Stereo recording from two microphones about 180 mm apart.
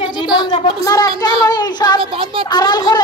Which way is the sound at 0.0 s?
25° left (ahead or behind).